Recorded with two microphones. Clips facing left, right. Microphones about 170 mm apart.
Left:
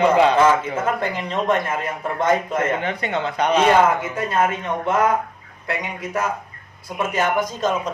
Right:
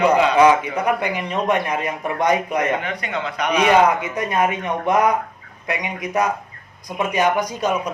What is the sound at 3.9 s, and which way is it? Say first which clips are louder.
A man's voice: right 1 dB; 20° right (ahead or behind).